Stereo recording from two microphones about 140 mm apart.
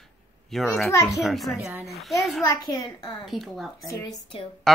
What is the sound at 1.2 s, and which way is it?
Speech, centre (ahead or behind).